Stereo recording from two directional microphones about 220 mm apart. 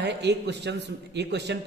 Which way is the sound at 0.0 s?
50° right (ahead or behind).